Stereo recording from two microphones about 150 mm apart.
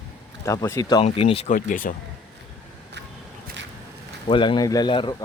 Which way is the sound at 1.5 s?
65° left (ahead or behind).